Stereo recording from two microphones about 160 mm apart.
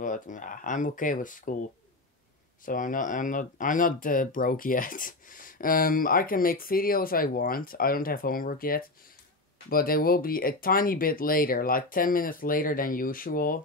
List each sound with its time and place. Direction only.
0.0 s speech: 55° left (ahead or behind)
2.6 s speech: 55° left (ahead or behind)